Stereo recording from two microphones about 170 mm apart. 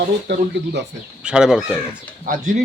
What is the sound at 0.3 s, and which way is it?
Speech, 90° right.